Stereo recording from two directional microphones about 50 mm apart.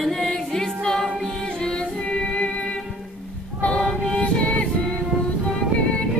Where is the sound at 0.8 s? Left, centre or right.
Centre.